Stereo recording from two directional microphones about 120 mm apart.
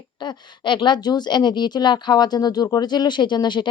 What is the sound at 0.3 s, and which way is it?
Speech, 40° left (ahead or behind).